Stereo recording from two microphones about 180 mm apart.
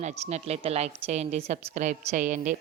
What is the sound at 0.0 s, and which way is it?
A woman's voice, 40° right (ahead or behind).